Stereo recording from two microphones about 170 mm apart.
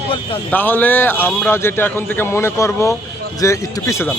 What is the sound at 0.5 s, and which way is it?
A man's voice, 10° left (ahead or behind).